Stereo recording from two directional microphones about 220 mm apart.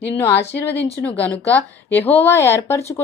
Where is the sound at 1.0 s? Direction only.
5° left (ahead or behind).